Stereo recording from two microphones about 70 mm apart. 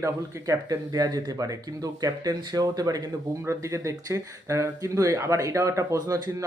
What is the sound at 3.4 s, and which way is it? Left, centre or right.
Speech, right.